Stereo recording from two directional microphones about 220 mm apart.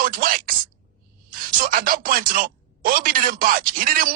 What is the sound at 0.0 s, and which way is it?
Speech, 40° right (ahead or behind).